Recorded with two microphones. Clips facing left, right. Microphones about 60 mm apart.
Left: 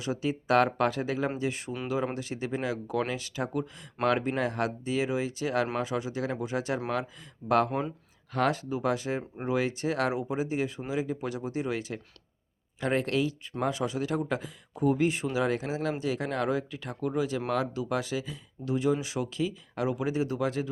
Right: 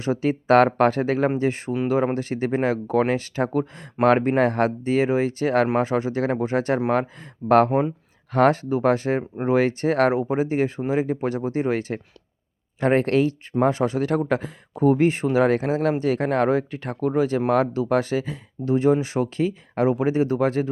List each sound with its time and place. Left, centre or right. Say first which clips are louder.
0.0 s speech: right 8 dB; right
7.7 s speech: right 10 dB; right
8.3 s speech: right 9 dB; right